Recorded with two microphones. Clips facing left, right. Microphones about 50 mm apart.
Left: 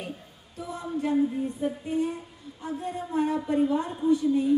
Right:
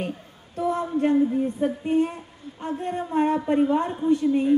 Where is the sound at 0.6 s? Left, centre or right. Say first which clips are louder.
Right 12 dB; right.